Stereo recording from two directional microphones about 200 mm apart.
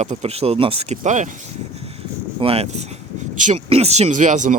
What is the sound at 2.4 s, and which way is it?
Speech, 30° right (ahead or behind).